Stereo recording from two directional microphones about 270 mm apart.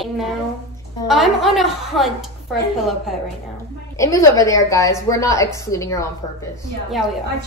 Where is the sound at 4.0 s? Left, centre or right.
Centre.